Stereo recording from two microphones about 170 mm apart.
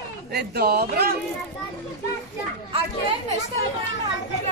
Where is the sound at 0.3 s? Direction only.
70° right (ahead or behind).